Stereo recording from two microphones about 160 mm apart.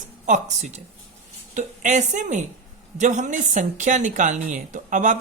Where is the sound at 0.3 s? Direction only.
50° right (ahead or behind).